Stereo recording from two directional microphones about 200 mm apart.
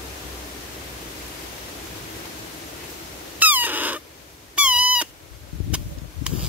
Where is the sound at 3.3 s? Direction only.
10° right (ahead or behind).